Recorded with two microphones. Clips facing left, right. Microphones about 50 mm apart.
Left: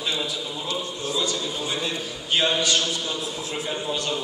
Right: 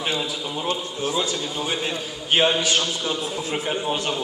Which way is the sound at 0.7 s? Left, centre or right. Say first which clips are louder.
Right 4 dB; right.